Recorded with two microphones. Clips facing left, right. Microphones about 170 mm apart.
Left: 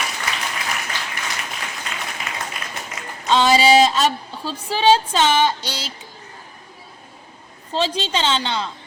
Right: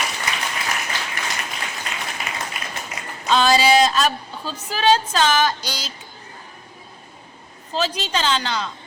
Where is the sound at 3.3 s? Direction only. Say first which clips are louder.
Left 2 dB; 20° left (ahead or behind).